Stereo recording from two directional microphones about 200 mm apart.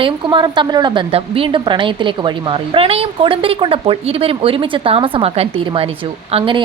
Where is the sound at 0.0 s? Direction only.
25° right (ahead or behind).